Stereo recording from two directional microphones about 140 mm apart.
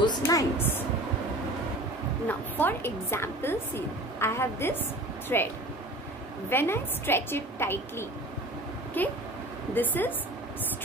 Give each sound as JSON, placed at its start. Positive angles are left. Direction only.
{"t": 0.0, "sound": "a sound", "side_deg": 30}
{"t": 2.2, "sound": "a woman's voice", "side_deg": 15}
{"t": 6.5, "sound": "a woman's voice", "side_deg": 15}